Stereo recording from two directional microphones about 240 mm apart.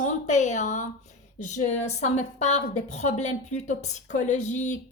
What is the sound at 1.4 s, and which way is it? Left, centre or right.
A woman's voice, left.